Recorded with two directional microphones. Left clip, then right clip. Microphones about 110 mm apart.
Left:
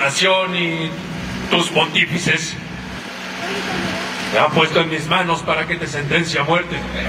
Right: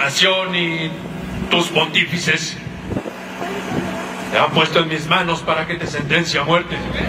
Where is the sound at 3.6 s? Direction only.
25° left (ahead or behind).